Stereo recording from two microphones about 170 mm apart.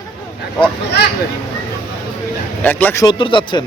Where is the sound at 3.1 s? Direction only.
30° left (ahead or behind).